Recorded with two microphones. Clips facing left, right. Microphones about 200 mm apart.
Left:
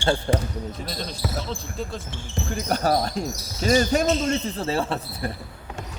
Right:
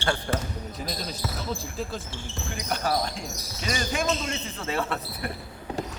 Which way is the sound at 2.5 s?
40° left (ahead or behind).